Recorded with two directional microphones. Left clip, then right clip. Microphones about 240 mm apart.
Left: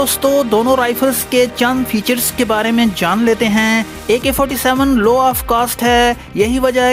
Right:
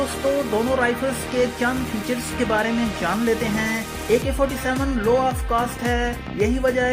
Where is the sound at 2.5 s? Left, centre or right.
Left.